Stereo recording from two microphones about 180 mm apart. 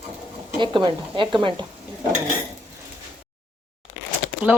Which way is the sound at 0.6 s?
25° right (ahead or behind).